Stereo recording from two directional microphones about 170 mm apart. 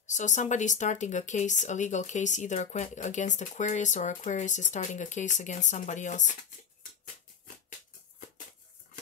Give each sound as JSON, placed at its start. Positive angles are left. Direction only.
{"t": 0.0, "sound": "a woman's voice", "side_deg": 45}